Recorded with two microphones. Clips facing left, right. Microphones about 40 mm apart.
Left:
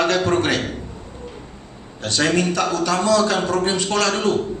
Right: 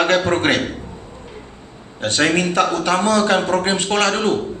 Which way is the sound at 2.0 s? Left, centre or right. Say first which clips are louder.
Right 2 dB; right.